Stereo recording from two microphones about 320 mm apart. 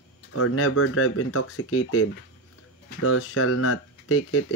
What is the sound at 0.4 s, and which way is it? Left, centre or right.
Speech, left.